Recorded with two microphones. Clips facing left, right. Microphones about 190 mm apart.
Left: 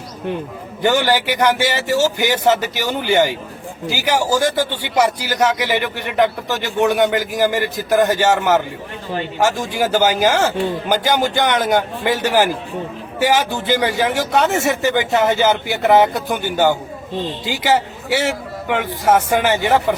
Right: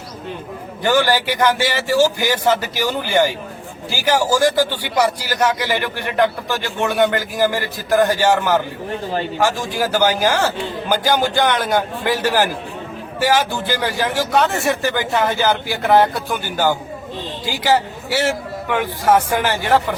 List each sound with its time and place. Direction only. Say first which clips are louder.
0.8 s speech: even; 20° left (ahead or behind)